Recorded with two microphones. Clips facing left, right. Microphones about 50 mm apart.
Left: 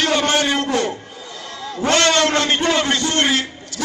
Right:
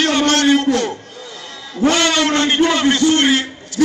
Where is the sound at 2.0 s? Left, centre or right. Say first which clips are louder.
Even; centre.